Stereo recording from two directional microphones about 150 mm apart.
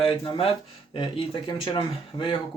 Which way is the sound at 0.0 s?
35° left (ahead or behind).